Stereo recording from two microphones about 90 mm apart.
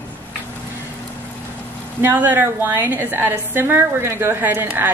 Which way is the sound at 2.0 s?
25° right (ahead or behind).